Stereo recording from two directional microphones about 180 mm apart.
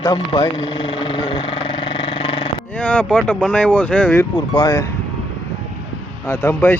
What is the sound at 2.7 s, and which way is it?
Speech, 5° left (ahead or behind).